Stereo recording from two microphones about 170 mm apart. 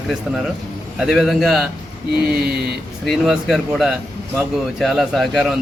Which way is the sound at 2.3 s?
65° right (ahead or behind).